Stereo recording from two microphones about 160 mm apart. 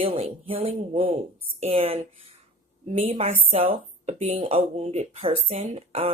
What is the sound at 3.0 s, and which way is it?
Speech, 40° right (ahead or behind).